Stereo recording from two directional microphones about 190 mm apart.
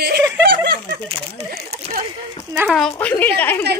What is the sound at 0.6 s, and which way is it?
Speech, 60° right (ahead or behind).